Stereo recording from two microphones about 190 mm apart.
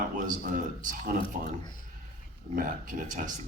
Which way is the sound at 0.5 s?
45° right (ahead or behind).